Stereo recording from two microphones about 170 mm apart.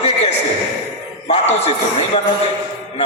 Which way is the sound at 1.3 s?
40° left (ahead or behind).